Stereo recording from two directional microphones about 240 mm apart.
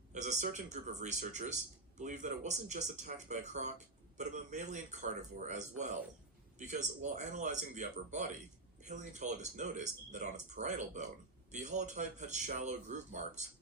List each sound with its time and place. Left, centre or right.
0.1 s speech: right